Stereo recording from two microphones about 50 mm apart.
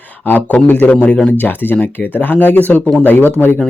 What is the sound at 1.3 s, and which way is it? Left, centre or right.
Speech, left.